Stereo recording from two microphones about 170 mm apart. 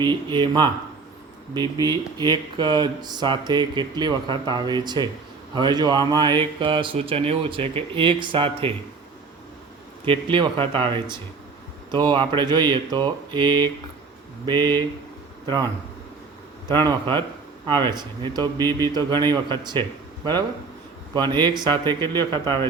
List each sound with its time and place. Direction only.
0.0 s speech: 25° right (ahead or behind)
10.1 s speech: 30° right (ahead or behind)
16.7 s speech: 25° right (ahead or behind)
21.1 s speech: 25° right (ahead or behind)